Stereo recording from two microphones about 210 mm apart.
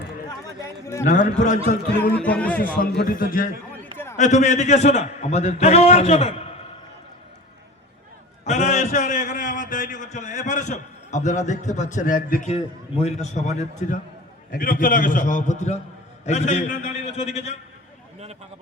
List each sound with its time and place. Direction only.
1.0 s a man's voice: 40° left (ahead or behind)
2.1 s a man's voice: 5° left (ahead or behind)
2.7 s a man's voice: 50° left (ahead or behind)
3.9 s a sound: 10° left (ahead or behind)
4.2 s a man's voice: 35° left (ahead or behind)
8.4 s a sound: 35° left (ahead or behind)
13.0 s a man's voice: 30° left (ahead or behind)